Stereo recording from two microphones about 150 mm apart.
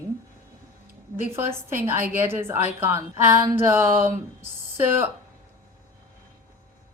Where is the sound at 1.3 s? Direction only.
15° right (ahead or behind).